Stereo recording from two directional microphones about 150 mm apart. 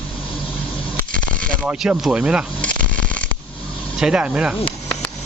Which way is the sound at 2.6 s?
10° left (ahead or behind).